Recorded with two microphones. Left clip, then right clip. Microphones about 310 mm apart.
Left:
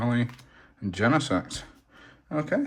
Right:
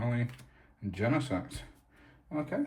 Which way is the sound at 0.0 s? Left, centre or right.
Centre.